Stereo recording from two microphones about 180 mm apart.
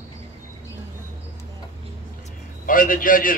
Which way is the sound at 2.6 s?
50° left (ahead or behind).